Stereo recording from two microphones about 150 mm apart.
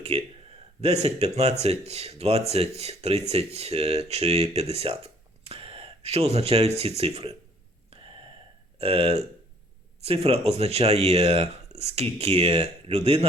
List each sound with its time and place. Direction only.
0.1 s speech: 40° right (ahead or behind)
8.8 s speech: 40° right (ahead or behind)